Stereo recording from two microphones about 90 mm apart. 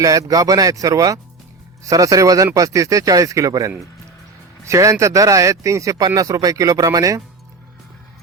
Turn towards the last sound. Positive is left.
turn(degrees=-40)  # may be behind; listen again after turning